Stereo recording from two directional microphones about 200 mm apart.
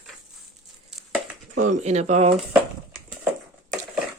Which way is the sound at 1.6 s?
35° right (ahead or behind).